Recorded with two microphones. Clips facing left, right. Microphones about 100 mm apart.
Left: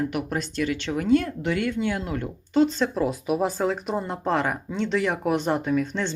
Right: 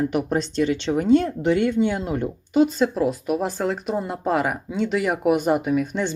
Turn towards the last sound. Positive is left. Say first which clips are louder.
# right 2 dB
turn(degrees=-10)  # may be behind; listen again after turning